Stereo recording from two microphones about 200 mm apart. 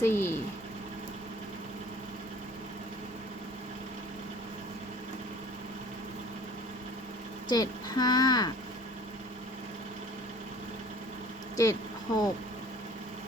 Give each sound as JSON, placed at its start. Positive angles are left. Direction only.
{"t": 0.0, "sound": "speech", "side_deg": 10}
{"t": 7.5, "sound": "speech", "side_deg": 20}
{"t": 11.5, "sound": "speech", "side_deg": 15}